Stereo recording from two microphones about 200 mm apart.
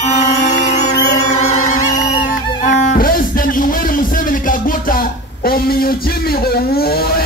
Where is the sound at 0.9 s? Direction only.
55° left (ahead or behind).